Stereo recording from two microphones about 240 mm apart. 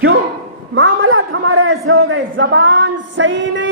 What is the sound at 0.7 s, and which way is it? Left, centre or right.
A man's voice, right.